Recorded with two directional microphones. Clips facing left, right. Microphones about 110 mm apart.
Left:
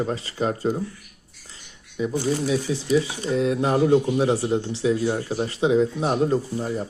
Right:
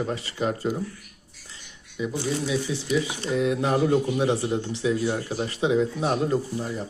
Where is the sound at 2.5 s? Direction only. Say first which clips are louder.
Left 4 dB; 35° left (ahead or behind).